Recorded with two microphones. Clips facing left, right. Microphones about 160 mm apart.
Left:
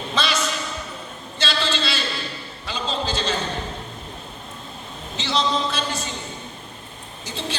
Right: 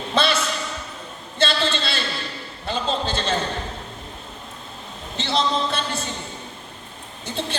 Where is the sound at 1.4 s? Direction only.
55° right (ahead or behind).